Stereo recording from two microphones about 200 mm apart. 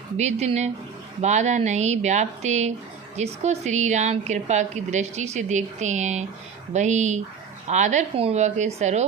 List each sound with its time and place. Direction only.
0.2 s a woman's voice: 35° right (ahead or behind)